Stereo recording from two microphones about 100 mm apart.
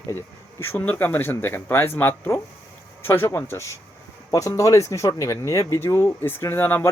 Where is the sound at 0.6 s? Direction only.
25° left (ahead or behind).